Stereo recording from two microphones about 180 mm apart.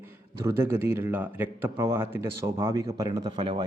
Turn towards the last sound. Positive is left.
turn(degrees=-25)  # may be behind; listen again after turning